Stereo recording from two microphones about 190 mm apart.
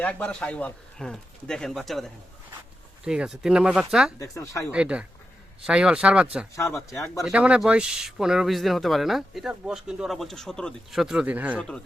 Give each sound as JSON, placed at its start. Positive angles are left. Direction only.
{"t": 0.0, "sound": "speech", "side_deg": 5}
{"t": 4.2, "sound": "speech", "side_deg": 15}
{"t": 4.7, "sound": "speech", "side_deg": -5}
{"t": 6.7, "sound": "speech", "side_deg": 15}
{"t": 7.2, "sound": "speech", "side_deg": -5}